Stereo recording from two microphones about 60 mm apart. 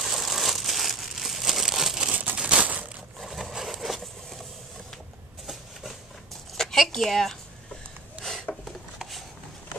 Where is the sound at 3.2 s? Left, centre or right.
Centre.